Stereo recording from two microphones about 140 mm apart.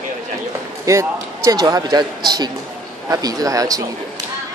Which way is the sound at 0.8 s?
20° right (ahead or behind).